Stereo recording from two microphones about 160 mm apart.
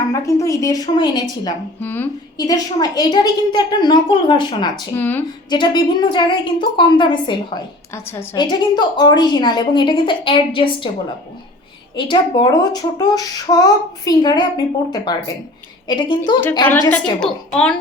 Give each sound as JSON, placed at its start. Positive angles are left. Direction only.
{"t": 0.1, "sound": "a woman's voice", "side_deg": 20}
{"t": 1.8, "sound": "speech", "side_deg": 10}
{"t": 2.5, "sound": "a woman's voice", "side_deg": 25}
{"t": 4.9, "sound": "a woman's voice", "side_deg": 10}
{"t": 5.5, "sound": "a woman's voice", "side_deg": 30}
{"t": 7.9, "sound": "a woman's voice", "side_deg": 15}
{"t": 8.4, "sound": "a woman's voice", "side_deg": 25}
{"t": 11.9, "sound": "a woman's voice", "side_deg": 30}
{"t": 16.9, "sound": "a woman's voice", "side_deg": 5}